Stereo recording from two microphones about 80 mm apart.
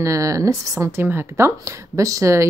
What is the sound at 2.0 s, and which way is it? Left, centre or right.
Speech, right.